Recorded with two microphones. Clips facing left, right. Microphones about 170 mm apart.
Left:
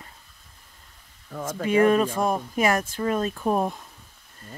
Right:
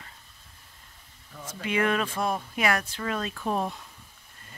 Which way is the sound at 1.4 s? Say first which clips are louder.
Left 7 dB; 45° left (ahead or behind).